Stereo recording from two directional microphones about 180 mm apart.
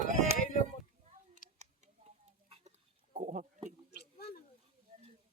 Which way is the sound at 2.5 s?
40° right (ahead or behind).